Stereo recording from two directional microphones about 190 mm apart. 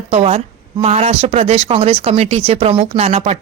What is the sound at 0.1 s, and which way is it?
A woman's voice, 30° right (ahead or behind).